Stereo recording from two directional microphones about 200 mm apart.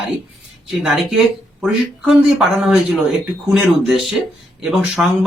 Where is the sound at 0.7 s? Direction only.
Centre (ahead or behind).